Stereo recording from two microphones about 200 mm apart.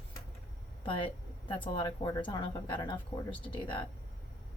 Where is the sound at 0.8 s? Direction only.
25° left (ahead or behind).